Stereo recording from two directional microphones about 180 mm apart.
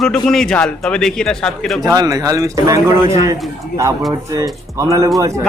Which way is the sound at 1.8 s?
20° right (ahead or behind).